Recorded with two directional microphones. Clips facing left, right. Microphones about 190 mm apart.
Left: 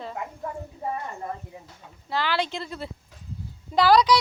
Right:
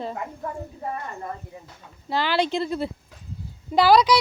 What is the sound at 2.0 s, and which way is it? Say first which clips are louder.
Speech: right 4 dB; 15° right (ahead or behind).